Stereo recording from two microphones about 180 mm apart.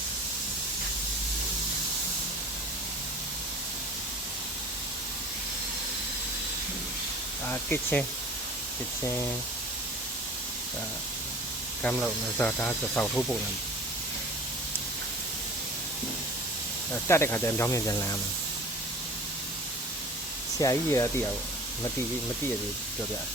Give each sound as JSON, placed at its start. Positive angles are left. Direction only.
{"t": 7.4, "sound": "speech", "side_deg": 10}
{"t": 11.8, "sound": "speech", "side_deg": 10}
{"t": 16.9, "sound": "speech", "side_deg": 15}
{"t": 20.6, "sound": "speech", "side_deg": 20}